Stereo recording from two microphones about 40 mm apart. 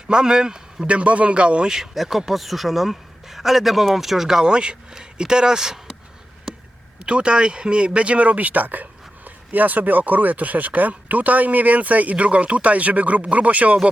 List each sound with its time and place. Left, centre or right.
0.1 s a man's voice: centre
0.9 s speech: right
1.6 s a man's voice: centre
6.5 s a sound: centre
7.0 s speech: right